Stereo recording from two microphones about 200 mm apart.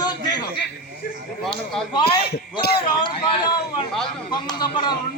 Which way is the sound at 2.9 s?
25° left (ahead or behind).